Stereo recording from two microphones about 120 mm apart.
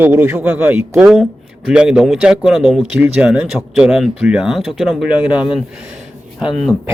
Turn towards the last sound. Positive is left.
turn(degrees=0)  # may be behind; listen again after turning